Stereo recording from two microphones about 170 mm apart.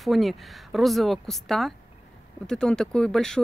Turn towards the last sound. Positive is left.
turn(degrees=5)  # may be behind; listen again after turning